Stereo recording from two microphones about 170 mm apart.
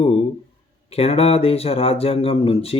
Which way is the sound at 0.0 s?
35° left (ahead or behind).